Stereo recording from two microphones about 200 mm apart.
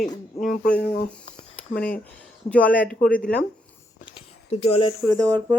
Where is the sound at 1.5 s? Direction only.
5° left (ahead or behind).